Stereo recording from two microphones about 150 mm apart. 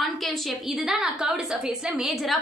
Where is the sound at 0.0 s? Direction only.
Centre (ahead or behind).